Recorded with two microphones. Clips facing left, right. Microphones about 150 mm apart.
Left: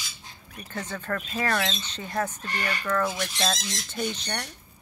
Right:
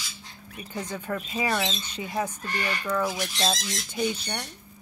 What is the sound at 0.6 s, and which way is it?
Speech, 10° right (ahead or behind).